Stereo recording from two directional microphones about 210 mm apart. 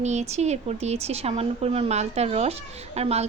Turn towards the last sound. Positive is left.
turn(degrees=-30)  # may be behind; listen again after turning